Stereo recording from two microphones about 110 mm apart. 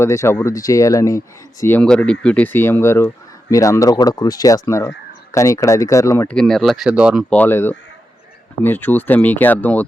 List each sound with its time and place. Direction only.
0.0 s speech: 25° left (ahead or behind)
1.8 s speech: 10° left (ahead or behind); by 6.2 s 30° left (ahead or behind)
6.2 s speech: 5° left (ahead or behind)
6.8 s speech: 10° right (ahead or behind)
7.3 s speech: 15° left (ahead or behind)